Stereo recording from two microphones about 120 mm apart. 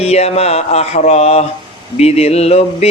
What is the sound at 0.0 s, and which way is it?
Speech, 60° left (ahead or behind).